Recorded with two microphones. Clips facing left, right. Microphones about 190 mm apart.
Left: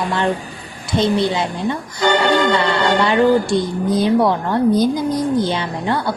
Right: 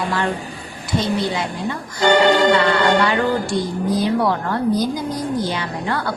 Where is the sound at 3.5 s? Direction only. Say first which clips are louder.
Left 3 dB; 20° left (ahead or behind).